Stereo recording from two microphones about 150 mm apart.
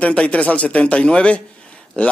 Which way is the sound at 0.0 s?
10° left (ahead or behind).